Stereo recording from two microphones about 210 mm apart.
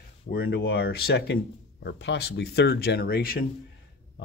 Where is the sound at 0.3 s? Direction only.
50° left (ahead or behind).